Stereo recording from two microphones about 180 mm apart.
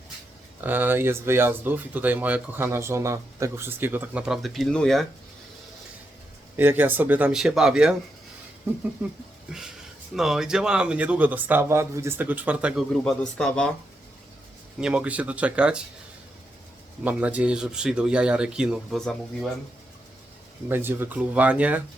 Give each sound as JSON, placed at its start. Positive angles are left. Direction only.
{"t": 0.6, "sound": "speech", "side_deg": -10}
{"t": 6.6, "sound": "speech", "side_deg": -10}
{"t": 9.5, "sound": "speech", "side_deg": -5}
{"t": 14.8, "sound": "speech", "side_deg": -5}
{"t": 17.0, "sound": "speech", "side_deg": -10}
{"t": 20.7, "sound": "speech", "side_deg": -10}